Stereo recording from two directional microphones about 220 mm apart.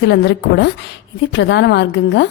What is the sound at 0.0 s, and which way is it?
A woman's voice, 50° left (ahead or behind).